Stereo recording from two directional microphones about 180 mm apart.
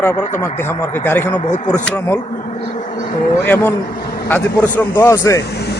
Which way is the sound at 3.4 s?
10° left (ahead or behind).